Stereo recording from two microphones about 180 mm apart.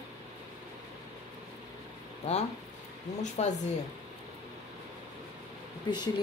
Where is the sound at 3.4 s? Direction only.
35° left (ahead or behind).